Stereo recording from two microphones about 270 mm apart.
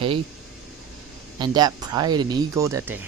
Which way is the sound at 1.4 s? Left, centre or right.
Centre.